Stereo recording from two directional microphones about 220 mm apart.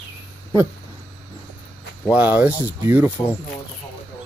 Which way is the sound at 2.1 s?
10° right (ahead or behind).